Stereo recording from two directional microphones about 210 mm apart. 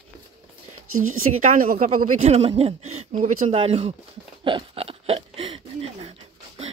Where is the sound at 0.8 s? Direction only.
85° right.